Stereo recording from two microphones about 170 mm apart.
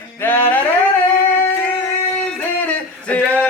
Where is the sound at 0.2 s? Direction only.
10° left (ahead or behind).